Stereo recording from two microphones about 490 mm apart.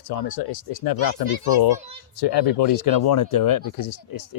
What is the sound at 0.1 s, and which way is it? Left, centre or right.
Speech, left.